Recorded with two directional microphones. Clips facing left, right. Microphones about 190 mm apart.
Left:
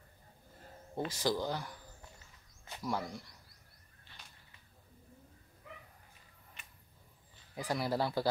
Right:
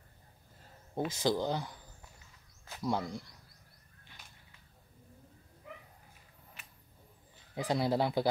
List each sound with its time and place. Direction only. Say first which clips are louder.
0.9 s speech: right 3 dB; 20° right (ahead or behind)
2.8 s speech: right 3 dB; 25° right (ahead or behind)
6.6 s a sound: right 1 dB; 5° right (ahead or behind)
7.5 s speech: right 4 dB; 20° right (ahead or behind)